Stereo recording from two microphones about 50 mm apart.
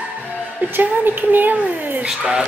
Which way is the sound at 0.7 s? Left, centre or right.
Right.